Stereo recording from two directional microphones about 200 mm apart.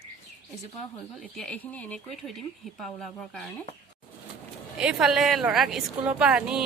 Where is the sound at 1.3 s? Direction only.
5° left (ahead or behind).